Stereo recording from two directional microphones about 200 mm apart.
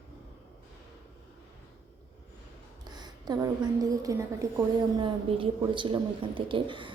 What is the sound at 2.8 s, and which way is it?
A woman's voice, 20° right (ahead or behind).